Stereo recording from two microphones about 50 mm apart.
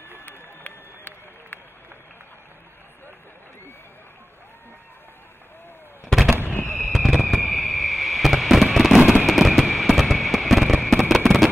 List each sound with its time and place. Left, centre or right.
0.2 s run: left
6.4 s fireworks: left
6.9 s fireworks: centre